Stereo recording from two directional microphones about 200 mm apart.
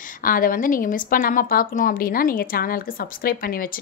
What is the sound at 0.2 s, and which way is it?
A woman's voice, 45° left (ahead or behind).